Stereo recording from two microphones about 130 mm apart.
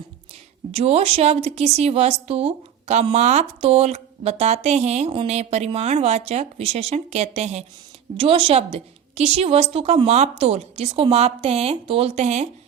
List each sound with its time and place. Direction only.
0.7 s a woman's voice: 50° right (ahead or behind)
8.1 s a woman's voice: 40° right (ahead or behind); by 12.5 s 60° right (ahead or behind)